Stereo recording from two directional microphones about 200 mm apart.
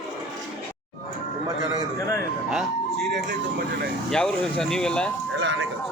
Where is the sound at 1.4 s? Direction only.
15° right (ahead or behind).